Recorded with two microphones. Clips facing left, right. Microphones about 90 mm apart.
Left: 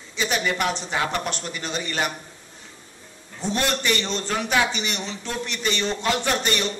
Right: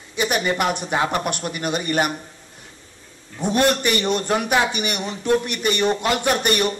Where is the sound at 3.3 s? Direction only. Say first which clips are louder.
Right 6 dB; 55° right (ahead or behind).